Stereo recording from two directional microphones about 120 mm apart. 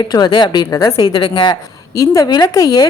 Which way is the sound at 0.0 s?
35° left (ahead or behind).